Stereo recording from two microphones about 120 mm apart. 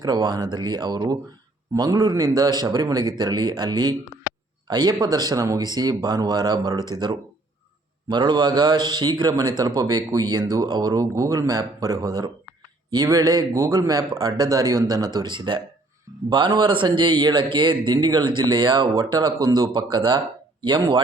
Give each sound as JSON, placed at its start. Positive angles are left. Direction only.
{"t": 0.0, "sound": "a man's voice", "side_deg": -35}